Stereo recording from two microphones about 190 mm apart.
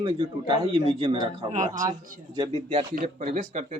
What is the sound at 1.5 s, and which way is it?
Speech, 40° right (ahead or behind).